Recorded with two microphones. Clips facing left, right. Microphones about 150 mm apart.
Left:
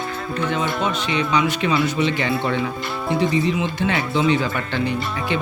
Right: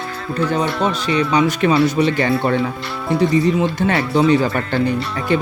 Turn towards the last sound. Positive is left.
turn(degrees=-45)  # may be behind; listen again after turning